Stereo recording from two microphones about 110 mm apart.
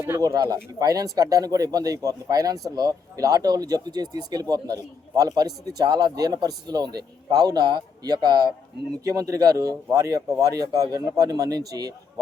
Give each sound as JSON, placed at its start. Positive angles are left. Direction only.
{"t": 0.2, "sound": "speech", "side_deg": -35}